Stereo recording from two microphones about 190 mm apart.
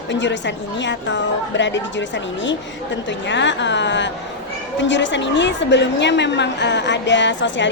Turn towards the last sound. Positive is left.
turn(degrees=70)  # may be behind; listen again after turning